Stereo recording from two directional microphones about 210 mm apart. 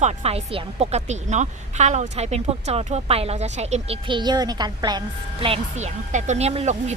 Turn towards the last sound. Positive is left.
turn(degrees=-30)  # may be behind; listen again after turning